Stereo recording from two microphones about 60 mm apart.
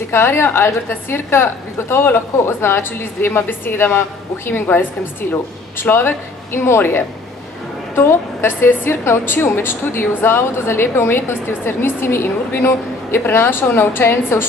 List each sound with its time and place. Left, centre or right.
0.1 s a woman's voice: left